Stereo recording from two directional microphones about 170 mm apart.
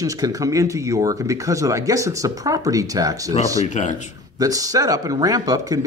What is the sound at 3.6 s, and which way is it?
Speech, 45° left (ahead or behind).